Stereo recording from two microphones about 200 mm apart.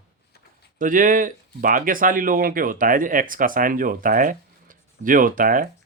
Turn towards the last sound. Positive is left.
turn(degrees=-45)  # may be behind; listen again after turning